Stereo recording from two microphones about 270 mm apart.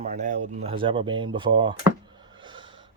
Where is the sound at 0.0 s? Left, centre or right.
Right.